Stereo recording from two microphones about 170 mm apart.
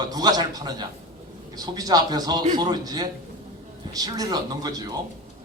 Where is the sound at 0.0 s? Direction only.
25° right (ahead or behind).